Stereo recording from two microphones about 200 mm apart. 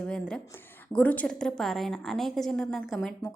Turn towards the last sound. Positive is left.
turn(degrees=0)  # may be behind; listen again after turning